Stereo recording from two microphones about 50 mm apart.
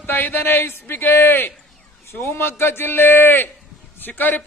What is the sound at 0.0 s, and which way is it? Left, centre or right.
A man's voice, left.